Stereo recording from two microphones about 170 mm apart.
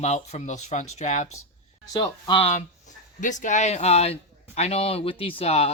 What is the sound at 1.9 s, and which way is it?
Speech, 25° left (ahead or behind).